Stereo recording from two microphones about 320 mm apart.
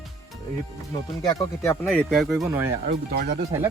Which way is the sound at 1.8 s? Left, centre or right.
Centre.